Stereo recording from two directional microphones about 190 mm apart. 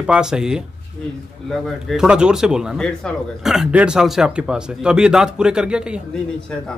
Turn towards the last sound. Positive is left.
turn(degrees=-5)  # may be behind; listen again after turning